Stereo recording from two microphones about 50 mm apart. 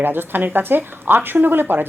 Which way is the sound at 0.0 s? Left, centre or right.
Right.